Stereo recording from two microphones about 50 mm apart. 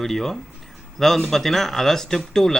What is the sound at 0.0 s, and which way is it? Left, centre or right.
Speech, centre.